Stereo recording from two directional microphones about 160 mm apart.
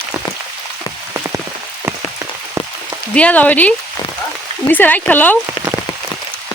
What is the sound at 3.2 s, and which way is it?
Speech, 10° left (ahead or behind).